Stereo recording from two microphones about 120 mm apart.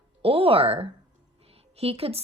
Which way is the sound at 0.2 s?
50° right (ahead or behind).